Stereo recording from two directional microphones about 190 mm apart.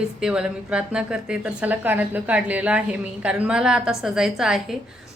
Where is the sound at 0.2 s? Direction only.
5° right (ahead or behind).